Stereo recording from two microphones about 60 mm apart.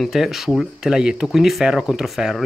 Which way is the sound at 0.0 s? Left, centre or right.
Centre.